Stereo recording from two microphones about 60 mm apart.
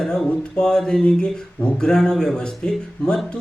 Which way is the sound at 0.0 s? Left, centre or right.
Centre.